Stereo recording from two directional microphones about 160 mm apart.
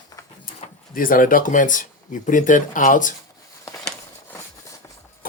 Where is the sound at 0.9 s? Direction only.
60° left (ahead or behind).